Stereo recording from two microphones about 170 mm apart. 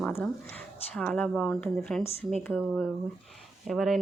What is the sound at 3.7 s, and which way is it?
Speech, centre (ahead or behind).